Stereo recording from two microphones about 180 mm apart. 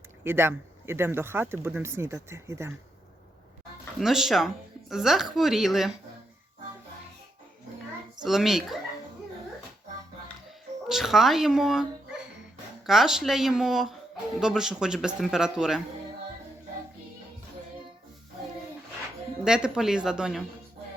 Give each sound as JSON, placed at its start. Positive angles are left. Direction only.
{"t": 0.3, "sound": "speech", "side_deg": -10}
{"t": 4.0, "sound": "speech", "side_deg": 0}
{"t": 8.2, "sound": "speech", "side_deg": 0}
{"t": 10.8, "sound": "speech", "side_deg": 0}
{"t": 19.5, "sound": "speech", "side_deg": -5}